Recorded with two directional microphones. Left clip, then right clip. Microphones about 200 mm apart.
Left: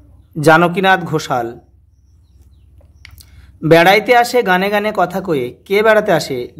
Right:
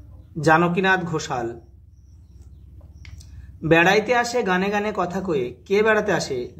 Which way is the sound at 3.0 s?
50° left (ahead or behind).